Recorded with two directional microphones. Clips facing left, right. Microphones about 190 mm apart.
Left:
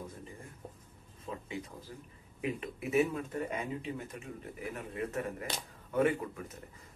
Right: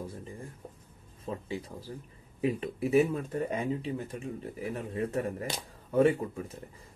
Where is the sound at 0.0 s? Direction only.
30° right (ahead or behind).